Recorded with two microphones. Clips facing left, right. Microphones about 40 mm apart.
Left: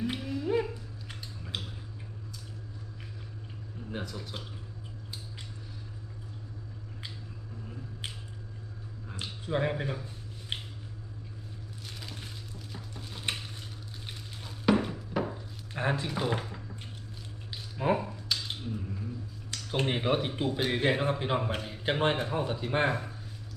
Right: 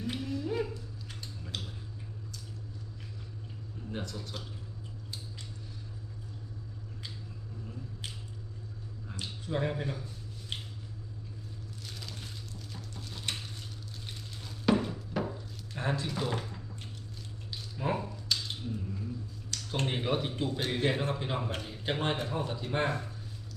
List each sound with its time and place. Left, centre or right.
0.0 s humming: centre
1.5 s tick-tock: centre
3.9 s speech: centre
8.0 s squish: left
9.1 s speech: left
10.5 s a sound: left
11.9 s a sound: centre
19.5 s speech: centre